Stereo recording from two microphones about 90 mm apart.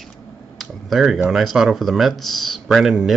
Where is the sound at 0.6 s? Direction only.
Centre (ahead or behind).